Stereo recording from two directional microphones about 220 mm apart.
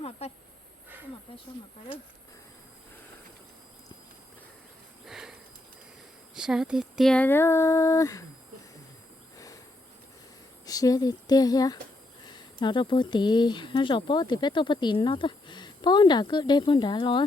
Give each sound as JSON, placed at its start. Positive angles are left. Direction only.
{"t": 0.2, "sound": "a sound", "side_deg": 30}
{"t": 1.3, "sound": "speech", "side_deg": 25}
{"t": 5.0, "sound": "sniff", "side_deg": 0}
{"t": 6.3, "sound": "speech", "side_deg": 0}
{"t": 10.7, "sound": "speech", "side_deg": 15}